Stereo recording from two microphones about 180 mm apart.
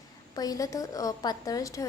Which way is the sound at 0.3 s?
20° left (ahead or behind).